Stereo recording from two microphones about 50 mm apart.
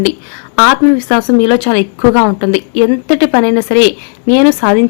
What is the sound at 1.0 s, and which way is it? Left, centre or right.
Speech, left.